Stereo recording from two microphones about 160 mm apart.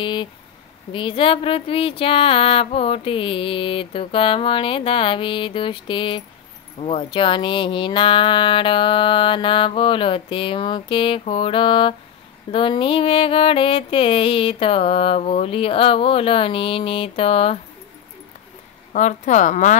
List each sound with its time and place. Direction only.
0.0 s speech: 30° left (ahead or behind)
0.9 s a sound: 30° left (ahead or behind)
18.9 s a woman's voice: 50° left (ahead or behind)